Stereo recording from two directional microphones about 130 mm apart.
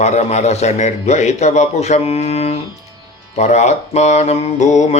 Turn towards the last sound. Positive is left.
turn(degrees=65)  # may be behind; listen again after turning